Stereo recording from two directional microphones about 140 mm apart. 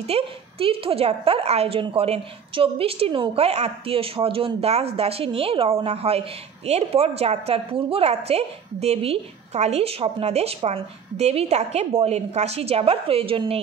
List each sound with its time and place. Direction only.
0.0 s a woman's voice: 45° right (ahead or behind)